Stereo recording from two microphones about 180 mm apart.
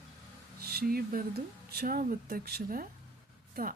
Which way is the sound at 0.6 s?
60° right (ahead or behind).